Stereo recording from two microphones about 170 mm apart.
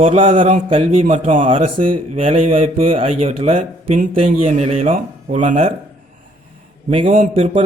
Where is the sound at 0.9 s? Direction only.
50° right (ahead or behind).